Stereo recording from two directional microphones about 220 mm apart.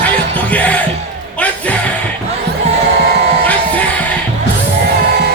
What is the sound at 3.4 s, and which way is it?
Music, 5° left (ahead or behind).